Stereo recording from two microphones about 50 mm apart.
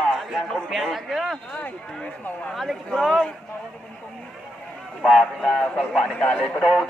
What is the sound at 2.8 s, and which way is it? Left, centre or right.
Speech, centre.